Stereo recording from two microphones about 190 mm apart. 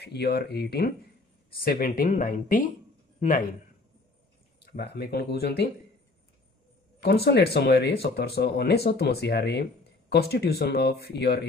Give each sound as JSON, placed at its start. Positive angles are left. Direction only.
{"t": 0.0, "sound": "a man's voice", "side_deg": 60}
{"t": 4.6, "sound": "speech", "side_deg": 60}
{"t": 7.0, "sound": "speech", "side_deg": 55}